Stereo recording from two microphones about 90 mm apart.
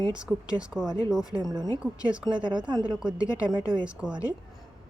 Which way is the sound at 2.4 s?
55° right (ahead or behind).